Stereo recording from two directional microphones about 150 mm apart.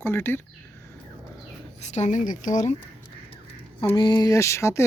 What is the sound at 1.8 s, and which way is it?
Speech, 50° left (ahead or behind).